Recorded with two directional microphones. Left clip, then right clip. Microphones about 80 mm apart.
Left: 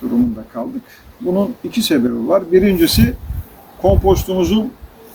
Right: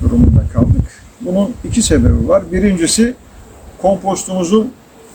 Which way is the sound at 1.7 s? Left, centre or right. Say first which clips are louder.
Right 3 dB; right.